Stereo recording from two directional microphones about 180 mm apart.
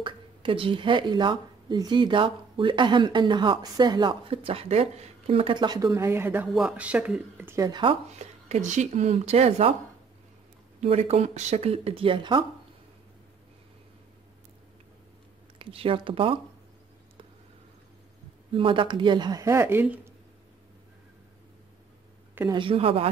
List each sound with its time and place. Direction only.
0.0 s speech: 30° right (ahead or behind)
10.8 s speech: 35° right (ahead or behind)
15.6 s speech: 30° right (ahead or behind)
18.5 s speech: 30° right (ahead or behind); by 20.0 s 10° right (ahead or behind)
22.5 s speech: 30° right (ahead or behind)